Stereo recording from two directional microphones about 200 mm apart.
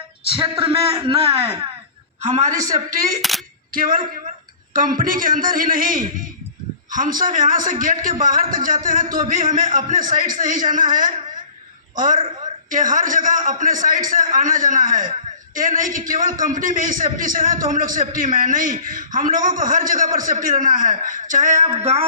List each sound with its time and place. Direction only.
0.3 s a man's voice: 25° right (ahead or behind); by 3.2 s 45° right (ahead or behind)
3.2 s speech: centre (ahead or behind)
3.7 s a man's voice: 45° right (ahead or behind)